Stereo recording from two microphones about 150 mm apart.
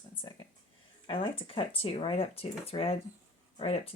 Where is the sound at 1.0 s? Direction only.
35° left (ahead or behind).